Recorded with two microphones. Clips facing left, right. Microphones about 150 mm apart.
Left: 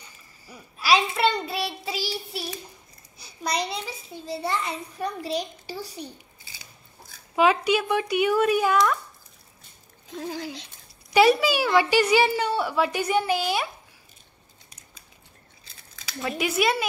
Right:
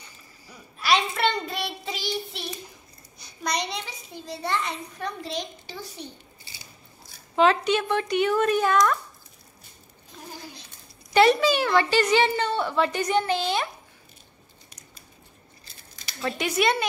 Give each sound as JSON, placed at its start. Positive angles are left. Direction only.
{"t": 0.5, "sound": "child singing", "side_deg": 5}
{"t": 3.2, "sound": "a child's voice", "side_deg": 5}
{"t": 7.3, "sound": "a woman's voice", "side_deg": 5}
{"t": 10.1, "sound": "speech", "side_deg": 90}
{"t": 11.1, "sound": "a woman's voice", "side_deg": 5}
{"t": 16.2, "sound": "a child's voice", "side_deg": 5}